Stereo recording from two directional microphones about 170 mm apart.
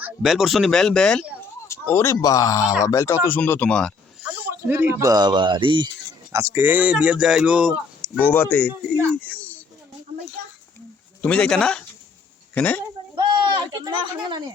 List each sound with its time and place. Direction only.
0.0 s speech: centre (ahead or behind)
1.6 s speech: 15° left (ahead or behind)
4.2 s speech: 10° right (ahead or behind); by 5.9 s 30° right (ahead or behind)
6.3 s speech: 15° right (ahead or behind)
8.0 s speech: 5° left (ahead or behind)
11.2 s speech: 5° left (ahead or behind)
13.1 s a sound: 30° right (ahead or behind)